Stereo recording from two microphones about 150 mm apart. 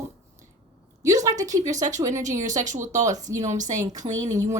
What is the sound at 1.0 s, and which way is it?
A woman's voice, 25° right (ahead or behind).